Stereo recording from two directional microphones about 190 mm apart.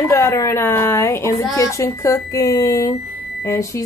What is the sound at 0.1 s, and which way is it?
Speech, 15° left (ahead or behind).